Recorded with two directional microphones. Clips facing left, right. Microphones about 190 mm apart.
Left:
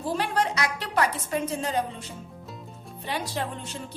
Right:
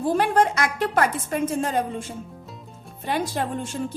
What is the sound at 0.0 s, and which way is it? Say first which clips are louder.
A woman's voice: right 6 dB; 50° right (ahead or behind).